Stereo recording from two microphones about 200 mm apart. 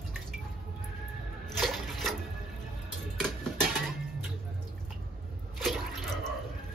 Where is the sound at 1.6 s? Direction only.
Centre (ahead or behind).